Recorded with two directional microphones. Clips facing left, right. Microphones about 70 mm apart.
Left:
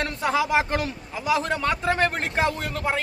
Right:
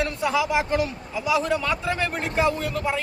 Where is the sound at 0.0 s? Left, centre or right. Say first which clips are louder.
Even; left.